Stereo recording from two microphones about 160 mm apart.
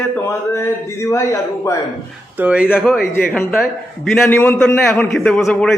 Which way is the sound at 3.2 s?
5° left (ahead or behind).